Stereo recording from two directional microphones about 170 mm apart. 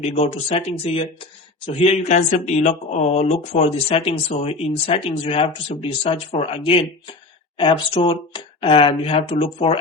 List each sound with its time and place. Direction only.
0.0 s speech: 40° left (ahead or behind)